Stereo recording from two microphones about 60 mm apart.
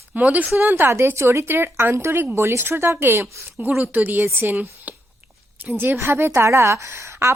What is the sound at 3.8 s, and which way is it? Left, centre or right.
A woman's voice, right.